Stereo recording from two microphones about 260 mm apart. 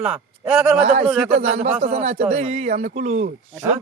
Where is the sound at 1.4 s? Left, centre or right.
Right.